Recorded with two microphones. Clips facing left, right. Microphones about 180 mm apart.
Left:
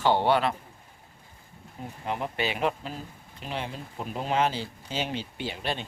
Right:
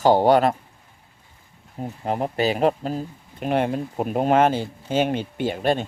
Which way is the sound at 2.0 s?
40° right (ahead or behind).